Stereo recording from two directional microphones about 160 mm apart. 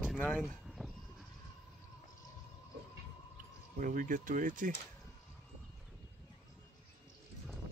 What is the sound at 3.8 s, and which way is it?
Speech, 55° right (ahead or behind).